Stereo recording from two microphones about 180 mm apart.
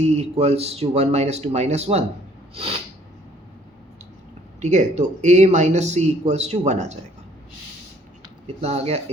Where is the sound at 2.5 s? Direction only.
35° right (ahead or behind).